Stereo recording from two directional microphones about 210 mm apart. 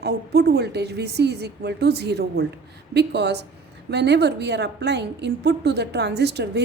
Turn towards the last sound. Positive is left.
turn(degrees=-55)  # may be behind; listen again after turning